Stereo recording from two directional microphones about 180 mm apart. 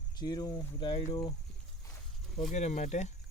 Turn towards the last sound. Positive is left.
turn(degrees=40)  # may be behind; listen again after turning